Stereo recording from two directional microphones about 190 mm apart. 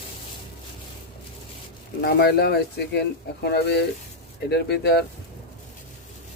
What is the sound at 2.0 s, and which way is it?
Speech, 55° left (ahead or behind).